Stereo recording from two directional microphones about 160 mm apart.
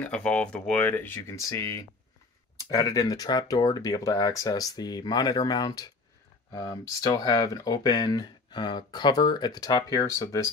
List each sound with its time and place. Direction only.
0.0 s speech: 10° left (ahead or behind)